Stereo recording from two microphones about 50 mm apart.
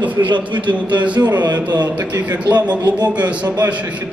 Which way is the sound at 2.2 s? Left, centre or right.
Right.